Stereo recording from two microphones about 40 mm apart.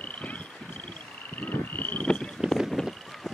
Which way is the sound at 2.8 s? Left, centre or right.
Centre.